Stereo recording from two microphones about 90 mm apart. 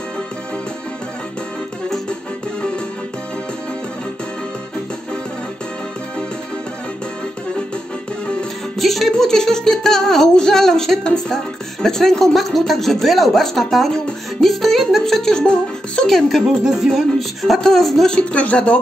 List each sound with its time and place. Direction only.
8.4 s music: centre (ahead or behind)